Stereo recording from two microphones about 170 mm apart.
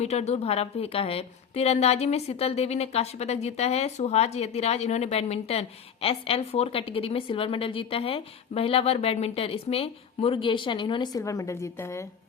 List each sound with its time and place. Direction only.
0.0 s a woman's voice: 40° left (ahead or behind); by 12.0 s 15° left (ahead or behind)